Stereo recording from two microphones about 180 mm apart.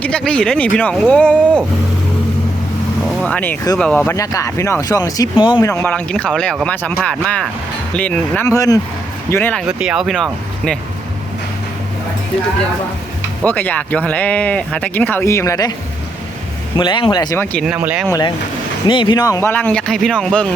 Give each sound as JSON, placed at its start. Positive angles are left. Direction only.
{"t": 0.0, "sound": "speech", "side_deg": 5}
{"t": 3.2, "sound": "speech", "side_deg": 5}
{"t": 5.6, "sound": "speech", "side_deg": 10}
{"t": 9.6, "sound": "speech", "side_deg": -5}
{"t": 13.4, "sound": "speech", "side_deg": 10}
{"t": 16.7, "sound": "speech", "side_deg": 25}
{"t": 17.4, "sound": "speech", "side_deg": 10}
{"t": 17.7, "sound": "speech", "side_deg": -5}
{"t": 18.1, "sound": "speech", "side_deg": 25}